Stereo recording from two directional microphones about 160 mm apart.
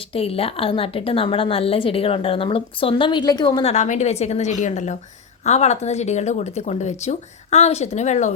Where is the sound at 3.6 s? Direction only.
45° left (ahead or behind).